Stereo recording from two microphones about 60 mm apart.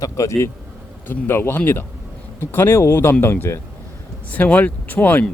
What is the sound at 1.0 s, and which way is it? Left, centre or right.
Speech, left.